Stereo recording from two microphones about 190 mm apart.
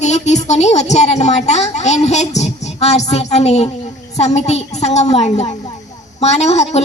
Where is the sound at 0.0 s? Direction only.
35° left (ahead or behind).